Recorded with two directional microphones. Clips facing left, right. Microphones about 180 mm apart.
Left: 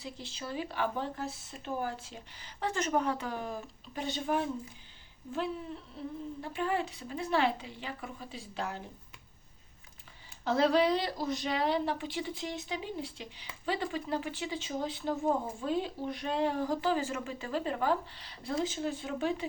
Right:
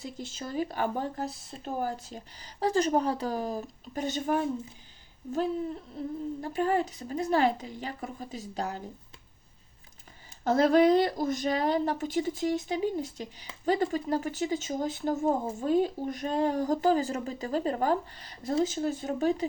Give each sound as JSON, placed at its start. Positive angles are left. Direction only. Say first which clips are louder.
{"t": 0.0, "sound": "speech", "louder": "right 4 dB", "side_deg": -45}
{"t": 10.4, "sound": "speech", "louder": "right 5 dB", "side_deg": -45}